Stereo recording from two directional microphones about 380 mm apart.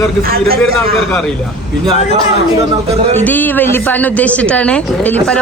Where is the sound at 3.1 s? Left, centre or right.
Centre.